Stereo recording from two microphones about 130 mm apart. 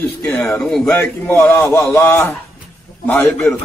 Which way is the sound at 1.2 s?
20° left (ahead or behind).